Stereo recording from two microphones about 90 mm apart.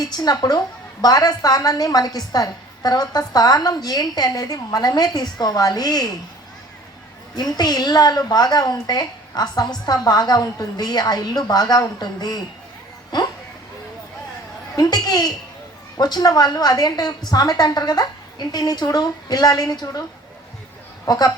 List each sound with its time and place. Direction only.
0.0 s a woman's voice: 45° left (ahead or behind)
7.3 s a woman's voice: 50° left (ahead or behind)
14.8 s a woman's voice: 50° left (ahead or behind)
21.1 s a woman's voice: 45° left (ahead or behind)